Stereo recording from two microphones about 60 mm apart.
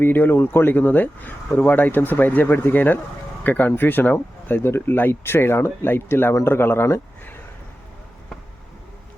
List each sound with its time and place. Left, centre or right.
0.0 s speech: left